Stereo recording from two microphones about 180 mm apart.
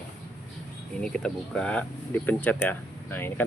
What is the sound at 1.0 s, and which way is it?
Speech, 5° left (ahead or behind).